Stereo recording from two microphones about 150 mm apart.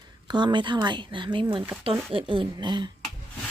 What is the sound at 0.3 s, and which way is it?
Speech, 30° right (ahead or behind).